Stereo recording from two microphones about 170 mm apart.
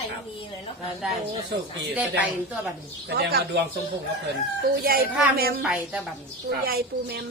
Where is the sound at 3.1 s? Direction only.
65° right (ahead or behind).